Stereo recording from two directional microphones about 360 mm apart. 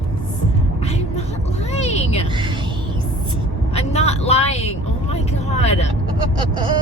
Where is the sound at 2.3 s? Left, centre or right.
Centre.